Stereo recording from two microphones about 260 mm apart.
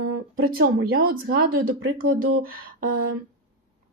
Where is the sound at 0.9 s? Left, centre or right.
Right.